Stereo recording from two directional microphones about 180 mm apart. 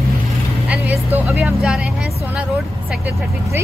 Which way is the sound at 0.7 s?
10° right (ahead or behind).